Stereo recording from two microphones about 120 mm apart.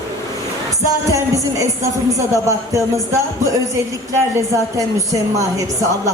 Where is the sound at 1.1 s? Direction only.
25° right (ahead or behind).